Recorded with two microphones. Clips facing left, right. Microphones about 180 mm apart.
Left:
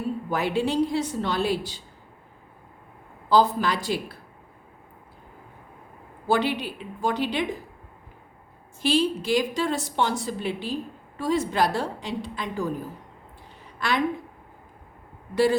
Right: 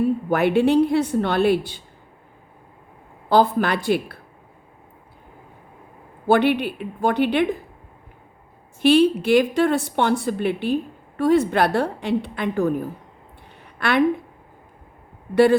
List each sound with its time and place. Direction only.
0.3 s speech: 60° right (ahead or behind)
3.2 s speech: 60° right (ahead or behind)
6.2 s speech: 60° right (ahead or behind)
8.8 s a woman's voice: 60° right (ahead or behind)